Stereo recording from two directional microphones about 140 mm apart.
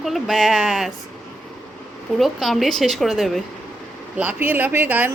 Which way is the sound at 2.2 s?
Centre (ahead or behind).